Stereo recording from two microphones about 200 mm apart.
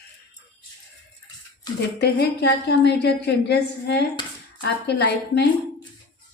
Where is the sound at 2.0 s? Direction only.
55° left (ahead or behind).